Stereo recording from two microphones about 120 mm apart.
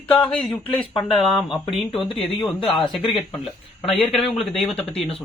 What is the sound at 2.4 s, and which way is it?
Speech, 40° left (ahead or behind).